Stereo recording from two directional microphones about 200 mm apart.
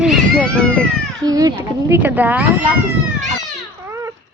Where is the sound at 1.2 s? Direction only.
20° right (ahead or behind).